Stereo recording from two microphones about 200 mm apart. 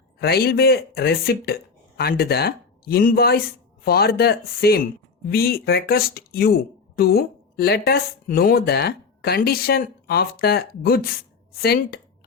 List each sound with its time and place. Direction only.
0.2 s speech: 50° left (ahead or behind)